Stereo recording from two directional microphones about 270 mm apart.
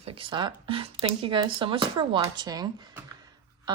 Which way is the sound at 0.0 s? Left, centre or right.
Centre.